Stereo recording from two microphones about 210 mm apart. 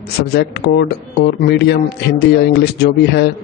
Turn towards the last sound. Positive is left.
turn(degrees=50)  # may be behind; listen again after turning